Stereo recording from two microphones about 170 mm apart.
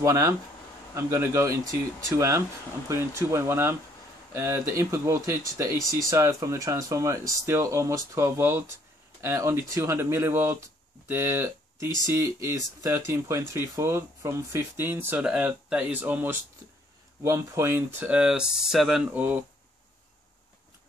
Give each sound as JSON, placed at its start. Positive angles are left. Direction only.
{"t": 0.0, "sound": "speech", "side_deg": -20}